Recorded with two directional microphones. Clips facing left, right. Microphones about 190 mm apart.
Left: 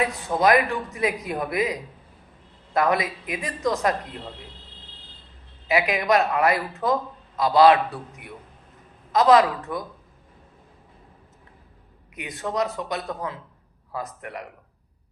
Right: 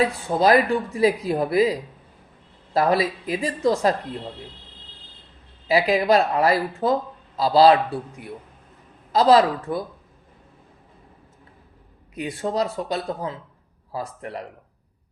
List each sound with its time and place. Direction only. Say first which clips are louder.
0.0 s speech: right 2 dB; 30° right (ahead or behind)
5.6 s speech: right 3 dB; 30° right (ahead or behind)
12.1 s speech: right 3 dB; 30° right (ahead or behind)